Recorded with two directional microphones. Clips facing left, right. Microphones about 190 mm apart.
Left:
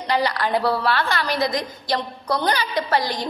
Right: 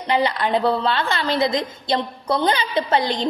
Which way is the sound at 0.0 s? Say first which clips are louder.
Right 2 dB; 20° right (ahead or behind).